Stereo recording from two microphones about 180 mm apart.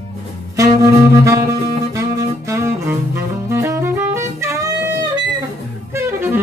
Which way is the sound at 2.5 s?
15° right (ahead or behind).